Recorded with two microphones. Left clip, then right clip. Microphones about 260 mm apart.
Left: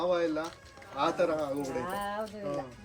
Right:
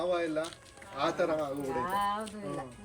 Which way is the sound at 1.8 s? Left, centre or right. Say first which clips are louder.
Right 4 dB; centre.